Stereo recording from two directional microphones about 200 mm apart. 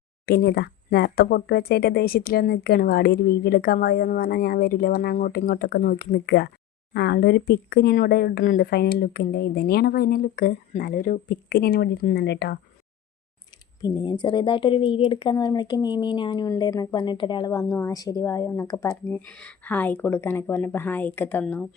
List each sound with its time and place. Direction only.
0.3 s speech: 55° left (ahead or behind)
13.8 s speech: 25° left (ahead or behind); by 21.7 s 5° left (ahead or behind)